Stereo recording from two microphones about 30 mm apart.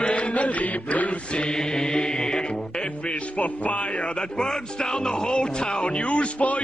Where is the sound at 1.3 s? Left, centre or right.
Left.